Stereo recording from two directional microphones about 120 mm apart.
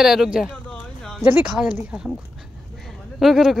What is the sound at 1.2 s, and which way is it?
Speech, 10° right (ahead or behind).